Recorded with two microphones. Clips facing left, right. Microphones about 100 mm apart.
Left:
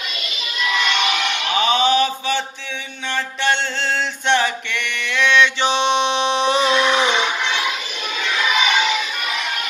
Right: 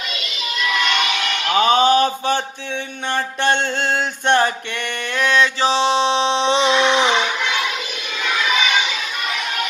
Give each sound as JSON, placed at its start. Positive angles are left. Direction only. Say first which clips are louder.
{"t": 1.5, "sound": "mantra", "louder": "right 3 dB", "side_deg": -45}